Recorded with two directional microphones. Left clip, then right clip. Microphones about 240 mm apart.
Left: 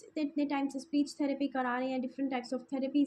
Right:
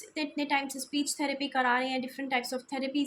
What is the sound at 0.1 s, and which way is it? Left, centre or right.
Speech, centre.